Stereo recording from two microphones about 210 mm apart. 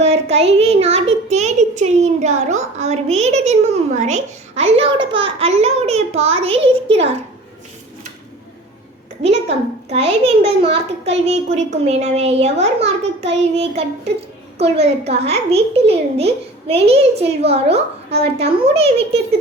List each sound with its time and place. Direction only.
0.0 s a child's voice: 30° right (ahead or behind)
9.9 s a child's voice: 30° right (ahead or behind)